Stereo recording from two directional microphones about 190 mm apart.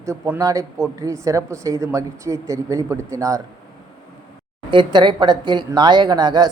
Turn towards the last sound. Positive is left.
turn(degrees=-20)  # may be behind; listen again after turning